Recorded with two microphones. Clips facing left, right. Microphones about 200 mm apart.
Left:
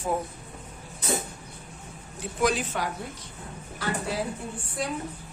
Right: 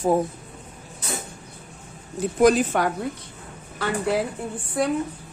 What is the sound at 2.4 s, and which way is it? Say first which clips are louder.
Speech: right 8 dB; 45° right (ahead or behind).